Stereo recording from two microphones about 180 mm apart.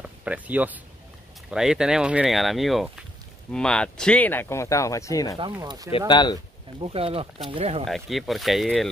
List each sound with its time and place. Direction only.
0.0 s speech: 5° right (ahead or behind); by 5.4 s 20° left (ahead or behind)
5.4 s speech: 20° right (ahead or behind)
5.9 s speech: 30° left (ahead or behind)
6.8 s speech: 30° right (ahead or behind)
7.8 s speech: centre (ahead or behind)